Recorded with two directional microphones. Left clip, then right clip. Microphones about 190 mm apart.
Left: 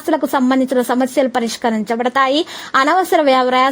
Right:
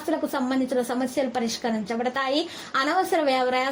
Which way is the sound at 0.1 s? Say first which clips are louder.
Left 11 dB; 40° left (ahead or behind).